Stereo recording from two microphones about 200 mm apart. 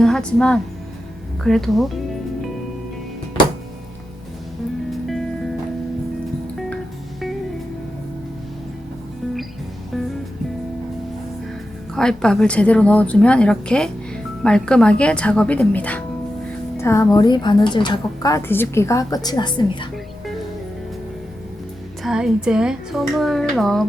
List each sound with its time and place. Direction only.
0.0 s speech: 5° left (ahead or behind)
4.9 s music: centre (ahead or behind)
11.9 s a woman's voice: 5° left (ahead or behind); by 19.9 s 20° left (ahead or behind)
22.0 s speech: 5° right (ahead or behind)